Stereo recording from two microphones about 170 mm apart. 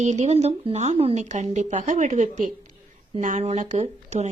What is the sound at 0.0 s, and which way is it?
Speech, 45° right (ahead or behind).